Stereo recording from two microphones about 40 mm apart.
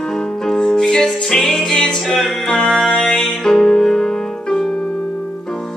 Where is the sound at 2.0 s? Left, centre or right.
Centre.